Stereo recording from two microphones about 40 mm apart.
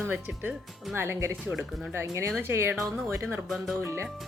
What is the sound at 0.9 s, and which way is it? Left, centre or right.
Speech, right.